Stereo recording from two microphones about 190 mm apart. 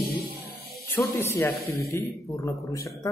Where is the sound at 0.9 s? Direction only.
15° left (ahead or behind).